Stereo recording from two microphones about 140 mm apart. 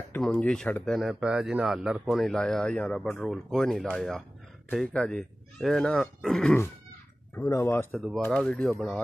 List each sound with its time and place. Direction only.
0.2 s speech: 5° left (ahead or behind)
0.9 s a man's voice: 5° right (ahead or behind)
7.3 s speech: 20° left (ahead or behind)
8.3 s a man's voice: 5° left (ahead or behind)